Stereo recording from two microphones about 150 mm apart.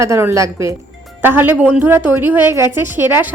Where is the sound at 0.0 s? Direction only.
15° right (ahead or behind).